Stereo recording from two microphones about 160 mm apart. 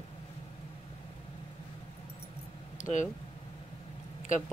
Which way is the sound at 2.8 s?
50° left (ahead or behind).